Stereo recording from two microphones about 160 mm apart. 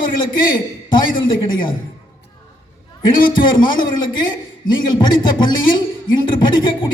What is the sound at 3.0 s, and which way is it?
Speech, 30° left (ahead or behind).